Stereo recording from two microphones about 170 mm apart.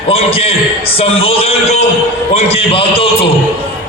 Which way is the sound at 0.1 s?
35° left (ahead or behind).